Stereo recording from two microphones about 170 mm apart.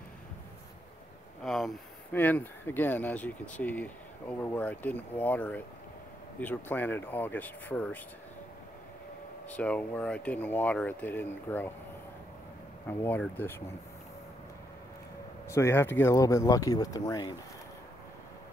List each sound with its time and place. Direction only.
1.4 s speech: centre (ahead or behind)
2.1 s speech: 10° left (ahead or behind)
9.5 s speech: 10° left (ahead or behind)
12.8 s speech: 10° left (ahead or behind)
15.4 s speech: 15° left (ahead or behind)